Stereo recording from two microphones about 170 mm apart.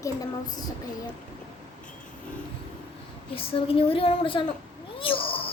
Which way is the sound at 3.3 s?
35° left (ahead or behind).